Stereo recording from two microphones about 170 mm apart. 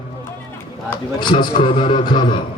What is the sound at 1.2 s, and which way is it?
A man's voice, 30° left (ahead or behind).